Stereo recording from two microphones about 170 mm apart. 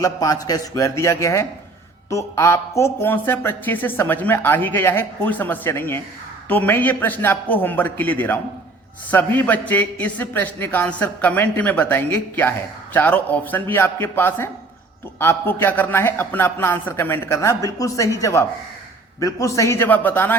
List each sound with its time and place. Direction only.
0.0 s a man's voice: 20° left (ahead or behind)